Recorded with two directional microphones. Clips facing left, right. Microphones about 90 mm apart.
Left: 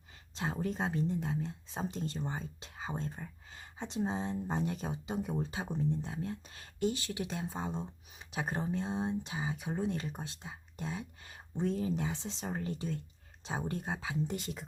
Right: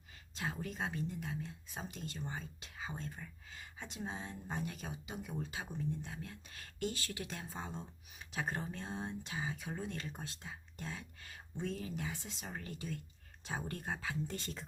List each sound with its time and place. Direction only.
0.3 s speech: 30° left (ahead or behind)
11.5 s speech: 30° left (ahead or behind); by 14.7 s 15° left (ahead or behind)